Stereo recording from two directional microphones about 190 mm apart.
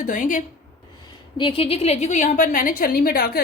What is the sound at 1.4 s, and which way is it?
A woman's voice, 25° left (ahead or behind).